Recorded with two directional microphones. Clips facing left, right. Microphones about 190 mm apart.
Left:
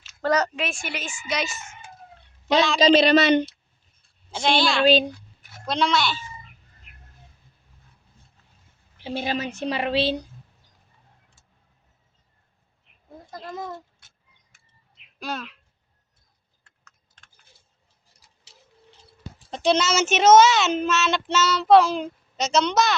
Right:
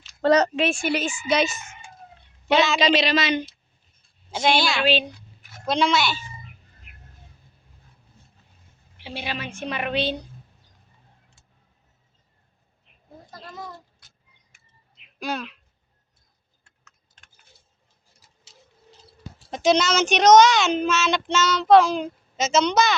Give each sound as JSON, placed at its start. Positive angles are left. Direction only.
{"t": 0.2, "sound": "speech", "side_deg": -30}
{"t": 2.6, "sound": "speech", "side_deg": -5}
{"t": 2.8, "sound": "speech", "side_deg": 55}
{"t": 4.4, "sound": "speech", "side_deg": 0}
{"t": 9.0, "sound": "a woman's voice", "side_deg": 45}
{"t": 15.2, "sound": "speech", "side_deg": 0}
{"t": 19.5, "sound": "speech", "side_deg": 0}